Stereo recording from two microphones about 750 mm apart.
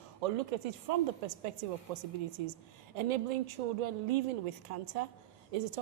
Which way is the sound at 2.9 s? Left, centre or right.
Right.